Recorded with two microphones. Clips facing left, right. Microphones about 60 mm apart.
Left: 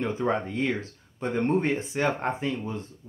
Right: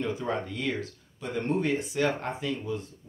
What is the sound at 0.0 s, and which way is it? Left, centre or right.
Speech, left.